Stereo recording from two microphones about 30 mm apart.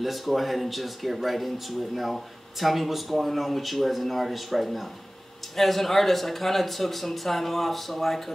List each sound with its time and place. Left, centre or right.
0.0 s speech: centre